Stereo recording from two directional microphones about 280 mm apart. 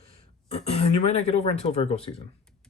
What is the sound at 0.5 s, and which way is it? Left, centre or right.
Speech, left.